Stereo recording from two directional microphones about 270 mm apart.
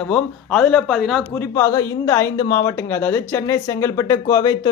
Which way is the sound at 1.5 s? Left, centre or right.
Centre.